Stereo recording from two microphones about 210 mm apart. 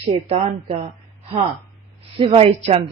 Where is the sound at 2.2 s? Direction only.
25° right (ahead or behind).